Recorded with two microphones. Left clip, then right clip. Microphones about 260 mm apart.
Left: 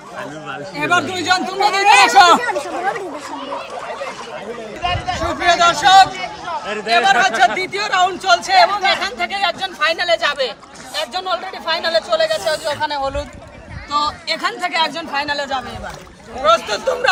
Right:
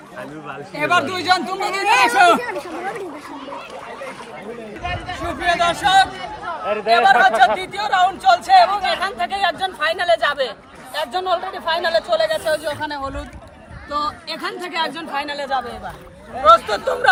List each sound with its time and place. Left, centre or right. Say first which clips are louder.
0.8 s speech: left 1 dB; centre
2.1 s a man's voice: left 2 dB; centre
2.4 s speech: left 6 dB; left
4.8 s speech: left 7 dB; centre
6.7 s speech: right 6 dB; centre
7.2 s a man's voice: even; centre